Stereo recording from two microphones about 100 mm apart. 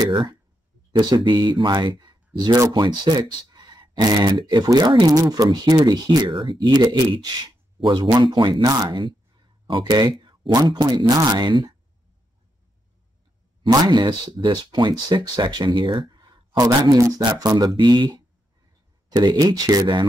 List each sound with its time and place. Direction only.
0.1 s speech: 55° right (ahead or behind)
6.3 s speech: 60° right (ahead or behind)
13.6 s speech: 45° right (ahead or behind)